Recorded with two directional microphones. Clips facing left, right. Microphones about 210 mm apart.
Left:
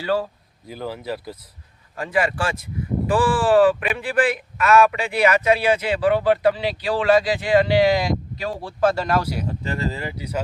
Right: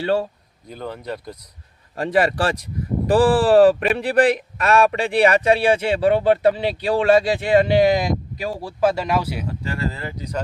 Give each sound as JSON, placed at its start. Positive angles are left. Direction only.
{"t": 0.0, "sound": "a man's voice", "side_deg": -25}
{"t": 0.7, "sound": "speech", "side_deg": 5}
{"t": 2.0, "sound": "a man's voice", "side_deg": -35}
{"t": 9.5, "sound": "speech", "side_deg": 20}